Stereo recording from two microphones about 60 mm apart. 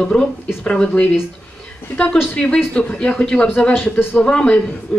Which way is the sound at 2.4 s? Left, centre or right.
Centre.